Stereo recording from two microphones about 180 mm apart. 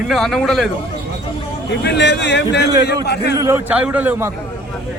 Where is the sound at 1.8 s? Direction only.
75° left (ahead or behind).